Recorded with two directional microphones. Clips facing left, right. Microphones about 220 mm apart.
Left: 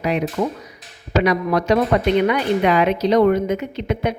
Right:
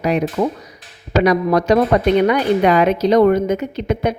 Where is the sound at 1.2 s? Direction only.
40° right (ahead or behind).